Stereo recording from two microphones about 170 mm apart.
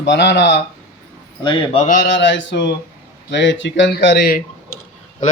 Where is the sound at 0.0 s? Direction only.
90° left.